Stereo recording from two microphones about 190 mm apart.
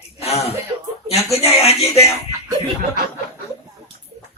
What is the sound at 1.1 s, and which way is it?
Speech, 35° left (ahead or behind).